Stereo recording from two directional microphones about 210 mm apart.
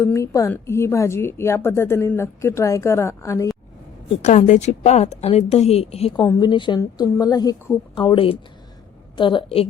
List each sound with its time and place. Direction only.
0.0 s a woman's voice: 15° left (ahead or behind)
4.2 s a woman's voice: 35° left (ahead or behind)